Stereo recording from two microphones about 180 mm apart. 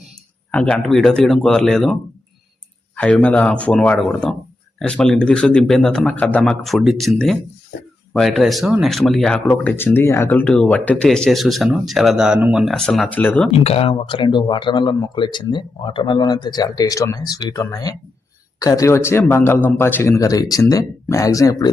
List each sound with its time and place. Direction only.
0.5 s speech: 5° left (ahead or behind)
13.5 s speech: 35° left (ahead or behind); by 21.7 s 20° left (ahead or behind)